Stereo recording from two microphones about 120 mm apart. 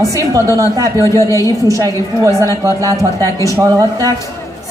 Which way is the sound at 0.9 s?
25° left (ahead or behind).